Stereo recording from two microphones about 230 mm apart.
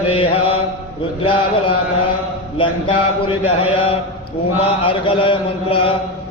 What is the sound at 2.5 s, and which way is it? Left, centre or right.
A man's voice, left.